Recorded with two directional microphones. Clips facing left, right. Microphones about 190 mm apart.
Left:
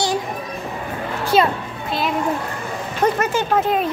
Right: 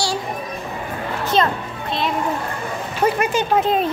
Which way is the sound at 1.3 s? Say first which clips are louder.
Left 2 dB; 5° left (ahead or behind).